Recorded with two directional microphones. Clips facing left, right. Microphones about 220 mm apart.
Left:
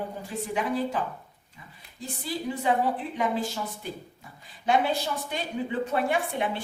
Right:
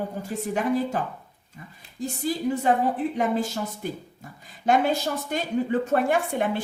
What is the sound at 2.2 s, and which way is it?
A woman's voice, 45° right (ahead or behind).